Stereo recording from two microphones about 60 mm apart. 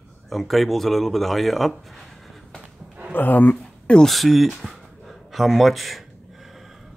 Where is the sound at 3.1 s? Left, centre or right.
Left.